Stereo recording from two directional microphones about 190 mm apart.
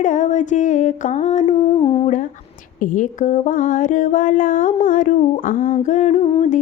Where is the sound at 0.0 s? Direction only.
40° left (ahead or behind).